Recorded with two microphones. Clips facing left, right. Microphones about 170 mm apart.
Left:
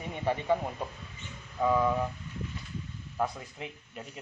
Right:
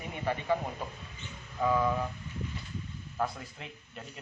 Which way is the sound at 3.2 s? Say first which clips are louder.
Left 2 dB; 10° left (ahead or behind).